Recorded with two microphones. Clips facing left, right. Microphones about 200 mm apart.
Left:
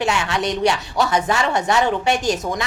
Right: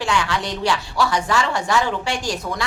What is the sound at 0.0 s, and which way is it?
A woman's voice, 25° left (ahead or behind).